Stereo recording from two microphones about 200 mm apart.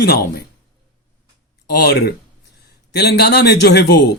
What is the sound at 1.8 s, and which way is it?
A man's voice, 55° left (ahead or behind).